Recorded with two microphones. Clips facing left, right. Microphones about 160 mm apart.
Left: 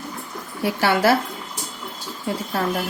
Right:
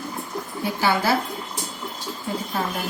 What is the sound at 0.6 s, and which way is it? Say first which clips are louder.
Speech: left 4 dB; 75° left (ahead or behind).